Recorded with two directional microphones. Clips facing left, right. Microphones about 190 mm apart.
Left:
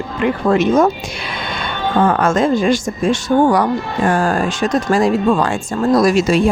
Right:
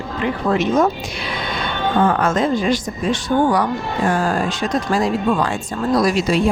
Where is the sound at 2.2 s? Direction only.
45° left (ahead or behind).